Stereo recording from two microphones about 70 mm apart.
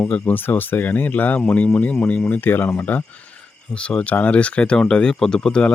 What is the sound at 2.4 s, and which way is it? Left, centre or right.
Speech, left.